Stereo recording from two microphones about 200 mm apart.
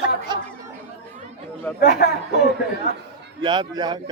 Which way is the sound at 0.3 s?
20° right (ahead or behind).